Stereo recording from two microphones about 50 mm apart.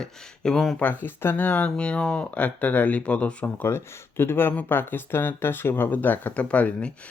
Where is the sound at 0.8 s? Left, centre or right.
Left.